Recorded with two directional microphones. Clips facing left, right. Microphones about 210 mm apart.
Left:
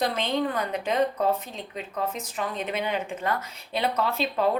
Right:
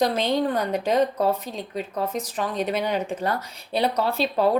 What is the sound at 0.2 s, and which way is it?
Speech, 40° right (ahead or behind).